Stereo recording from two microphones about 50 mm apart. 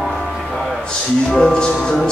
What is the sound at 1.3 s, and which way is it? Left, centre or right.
Speech, centre.